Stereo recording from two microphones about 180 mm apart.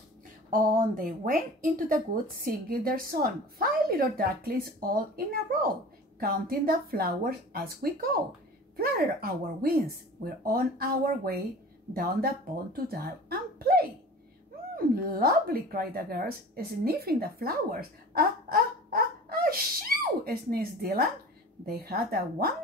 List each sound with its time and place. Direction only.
0.5 s a woman's voice: 50° right (ahead or behind)
15.0 s a woman's voice: 55° right (ahead or behind)